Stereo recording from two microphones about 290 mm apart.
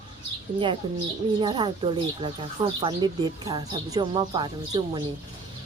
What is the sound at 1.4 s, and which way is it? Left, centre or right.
Speech, centre.